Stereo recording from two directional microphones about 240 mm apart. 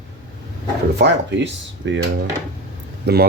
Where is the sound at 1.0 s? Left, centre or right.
Right.